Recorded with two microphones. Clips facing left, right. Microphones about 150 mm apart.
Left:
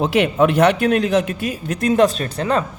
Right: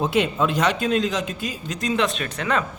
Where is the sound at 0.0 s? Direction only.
70° left (ahead or behind).